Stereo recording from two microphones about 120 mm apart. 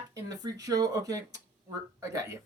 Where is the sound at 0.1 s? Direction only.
30° right (ahead or behind).